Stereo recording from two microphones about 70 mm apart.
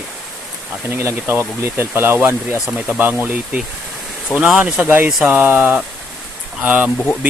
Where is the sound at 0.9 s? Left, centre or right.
Right; by 4.8 s centre.